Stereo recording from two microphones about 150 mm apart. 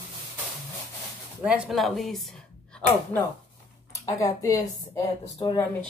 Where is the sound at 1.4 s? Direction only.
5° right (ahead or behind).